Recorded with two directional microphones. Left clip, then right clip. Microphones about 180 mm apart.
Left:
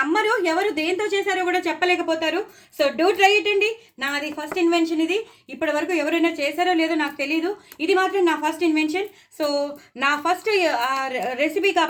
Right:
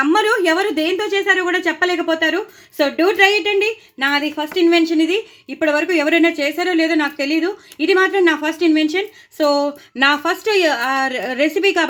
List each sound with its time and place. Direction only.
0.0 s a woman's voice: 60° right (ahead or behind)